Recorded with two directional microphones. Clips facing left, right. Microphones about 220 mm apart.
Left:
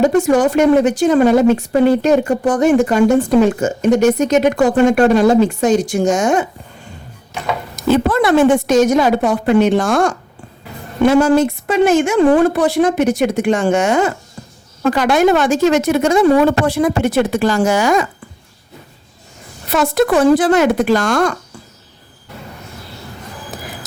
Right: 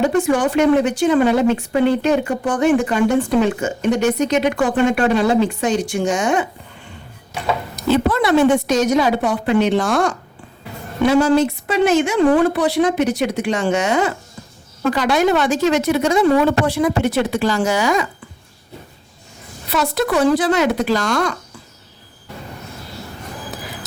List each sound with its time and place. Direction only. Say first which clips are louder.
0.0 s a woman's voice: left 4 dB; 40° left (ahead or behind)
7.8 s a woman's voice: left 3 dB; 50° left (ahead or behind)
19.7 s a woman's voice: left 5 dB; 50° left (ahead or behind)